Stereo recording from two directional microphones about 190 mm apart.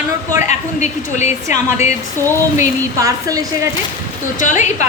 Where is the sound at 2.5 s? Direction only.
15° right (ahead or behind).